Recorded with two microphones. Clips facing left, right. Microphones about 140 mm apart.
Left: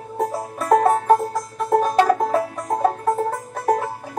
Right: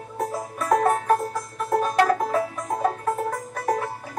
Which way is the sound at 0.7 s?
30° left (ahead or behind).